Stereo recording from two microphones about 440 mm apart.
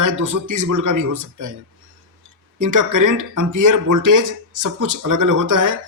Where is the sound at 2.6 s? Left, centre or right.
Right.